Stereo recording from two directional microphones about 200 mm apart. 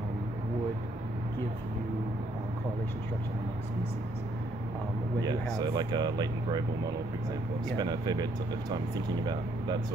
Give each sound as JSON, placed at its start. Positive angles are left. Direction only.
{"t": 5.2, "sound": "speech", "side_deg": -20}
{"t": 7.7, "sound": "speech", "side_deg": -20}